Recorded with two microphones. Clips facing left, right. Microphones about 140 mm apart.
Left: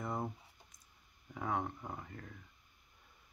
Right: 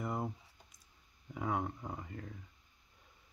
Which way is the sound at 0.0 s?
Centre (ahead or behind).